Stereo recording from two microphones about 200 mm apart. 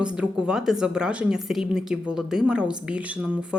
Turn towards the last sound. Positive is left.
turn(degrees=-5)  # may be behind; listen again after turning